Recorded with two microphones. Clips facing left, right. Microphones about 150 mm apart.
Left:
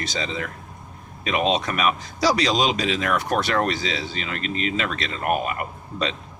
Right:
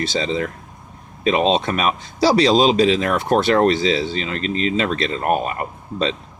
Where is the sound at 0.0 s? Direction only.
30° right (ahead or behind).